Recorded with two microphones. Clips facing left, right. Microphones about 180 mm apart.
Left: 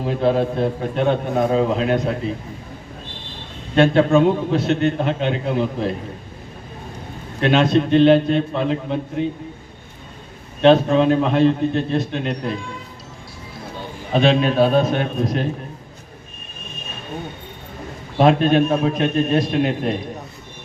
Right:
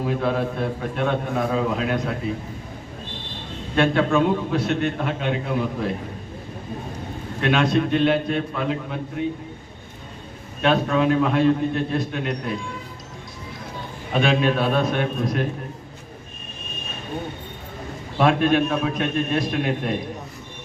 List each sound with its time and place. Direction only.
0.2 s a man's voice: 30° left (ahead or behind)
3.8 s a man's voice: 30° left (ahead or behind)
7.4 s a man's voice: 25° left (ahead or behind)
10.6 s a man's voice: 30° left (ahead or behind)
14.1 s a man's voice: 30° left (ahead or behind)
18.2 s a man's voice: 25° left (ahead or behind)